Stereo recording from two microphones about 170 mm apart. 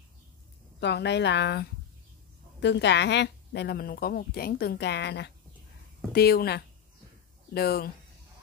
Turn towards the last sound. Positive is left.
turn(degrees=65)  # may be behind; listen again after turning